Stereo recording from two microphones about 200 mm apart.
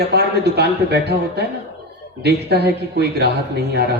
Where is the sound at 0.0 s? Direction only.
55° right (ahead or behind).